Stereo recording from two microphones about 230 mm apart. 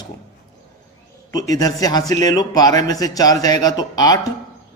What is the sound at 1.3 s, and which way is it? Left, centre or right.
A man's voice, centre.